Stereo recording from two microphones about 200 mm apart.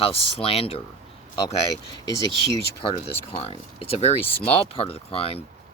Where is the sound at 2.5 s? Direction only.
25° left (ahead or behind).